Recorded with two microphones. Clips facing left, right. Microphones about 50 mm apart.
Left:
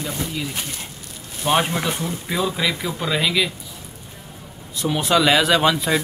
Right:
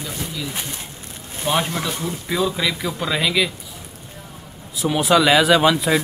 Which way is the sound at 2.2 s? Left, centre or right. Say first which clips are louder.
Right 1 dB; centre.